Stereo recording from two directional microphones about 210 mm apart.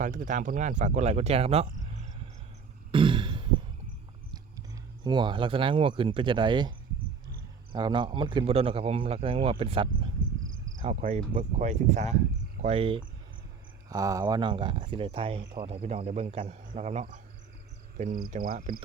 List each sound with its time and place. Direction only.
0.0 s speech: 40° right (ahead or behind)
2.9 s throat clearing: 25° right (ahead or behind)
5.0 s speech: 20° right (ahead or behind)
10.4 s cricket: 70° right (ahead or behind)
10.8 s speech: 35° right (ahead or behind)